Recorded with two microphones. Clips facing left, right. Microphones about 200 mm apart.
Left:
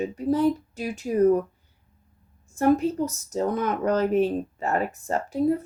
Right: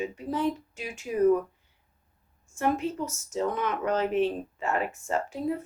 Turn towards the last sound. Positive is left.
turn(degrees=40)  # may be behind; listen again after turning